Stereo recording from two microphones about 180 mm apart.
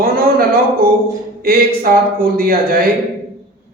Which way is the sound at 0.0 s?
55° right (ahead or behind).